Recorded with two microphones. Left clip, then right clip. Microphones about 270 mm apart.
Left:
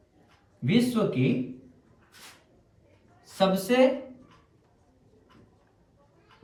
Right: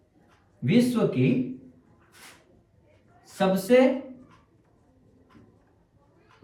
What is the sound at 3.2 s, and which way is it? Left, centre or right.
Speech, centre.